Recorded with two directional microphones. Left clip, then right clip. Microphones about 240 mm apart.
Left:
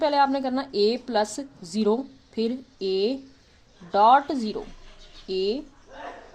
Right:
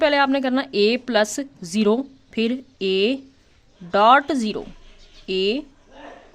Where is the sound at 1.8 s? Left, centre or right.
Right.